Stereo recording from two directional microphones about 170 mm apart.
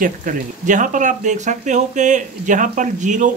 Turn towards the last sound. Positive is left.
turn(degrees=-45)  # may be behind; listen again after turning